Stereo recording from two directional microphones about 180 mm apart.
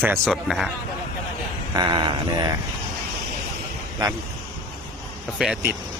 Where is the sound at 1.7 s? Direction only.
25° right (ahead or behind).